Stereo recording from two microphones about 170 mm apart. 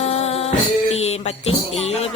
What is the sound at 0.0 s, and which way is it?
Music, 40° left (ahead or behind).